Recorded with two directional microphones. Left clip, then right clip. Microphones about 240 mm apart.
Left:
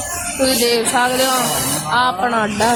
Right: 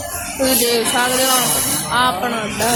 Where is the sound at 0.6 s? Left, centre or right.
Left.